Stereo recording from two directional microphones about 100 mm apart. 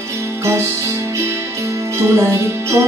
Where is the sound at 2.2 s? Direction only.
25° right (ahead or behind).